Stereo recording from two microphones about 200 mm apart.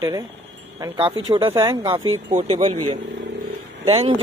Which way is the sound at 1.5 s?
15° right (ahead or behind).